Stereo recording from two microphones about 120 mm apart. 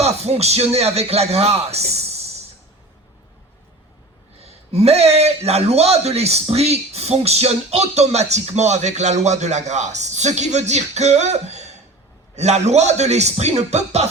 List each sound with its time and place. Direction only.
0.0 s speech: 60° right (ahead or behind)
4.4 s a man's voice: 60° right (ahead or behind)